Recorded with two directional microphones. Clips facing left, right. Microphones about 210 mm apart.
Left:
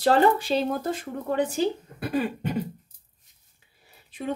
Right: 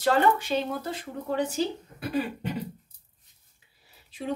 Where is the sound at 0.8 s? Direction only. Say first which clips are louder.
Left 4 dB; 55° left (ahead or behind).